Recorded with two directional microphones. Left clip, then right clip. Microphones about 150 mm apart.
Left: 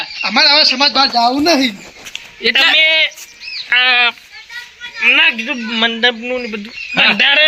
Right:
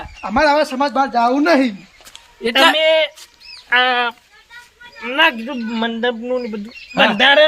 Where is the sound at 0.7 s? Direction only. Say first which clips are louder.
Left 5 dB; 20° right (ahead or behind).